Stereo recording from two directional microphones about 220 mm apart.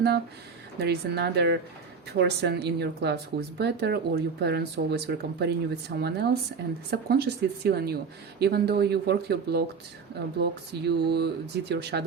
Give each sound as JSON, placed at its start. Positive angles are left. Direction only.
{"t": 0.8, "sound": "speech", "side_deg": -50}